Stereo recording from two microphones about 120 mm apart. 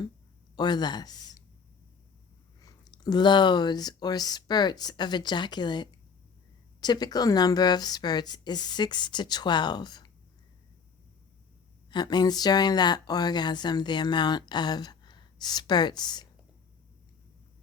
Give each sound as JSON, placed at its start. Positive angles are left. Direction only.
{"t": 0.5, "sound": "speech", "side_deg": 35}
{"t": 2.6, "sound": "speech", "side_deg": 30}
{"t": 11.9, "sound": "speech", "side_deg": 35}